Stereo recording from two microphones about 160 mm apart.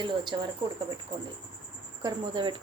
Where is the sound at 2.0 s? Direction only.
30° right (ahead or behind).